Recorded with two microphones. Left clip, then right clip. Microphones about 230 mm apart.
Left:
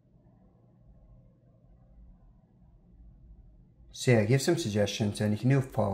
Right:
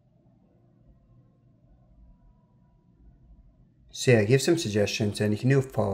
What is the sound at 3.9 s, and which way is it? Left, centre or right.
Speech, right.